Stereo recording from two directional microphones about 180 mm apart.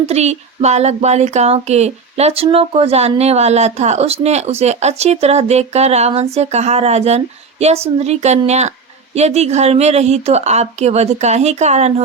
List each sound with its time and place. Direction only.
0.1 s speech: 35° right (ahead or behind)